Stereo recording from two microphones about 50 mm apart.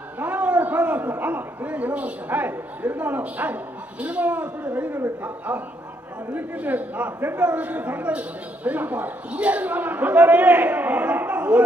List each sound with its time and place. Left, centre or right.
0.2 s a sound: right
1.2 s a man's voice: right
6.3 s a man's voice: right